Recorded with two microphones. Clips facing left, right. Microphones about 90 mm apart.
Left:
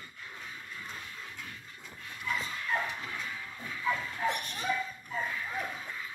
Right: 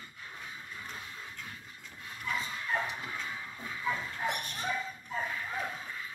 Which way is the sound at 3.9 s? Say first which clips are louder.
Left 2 dB; 15° right (ahead or behind).